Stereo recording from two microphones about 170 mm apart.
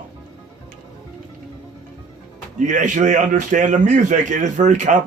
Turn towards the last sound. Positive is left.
turn(degrees=-45)  # may be behind; listen again after turning